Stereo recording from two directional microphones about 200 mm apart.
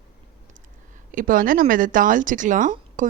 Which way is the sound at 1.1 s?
40° right (ahead or behind).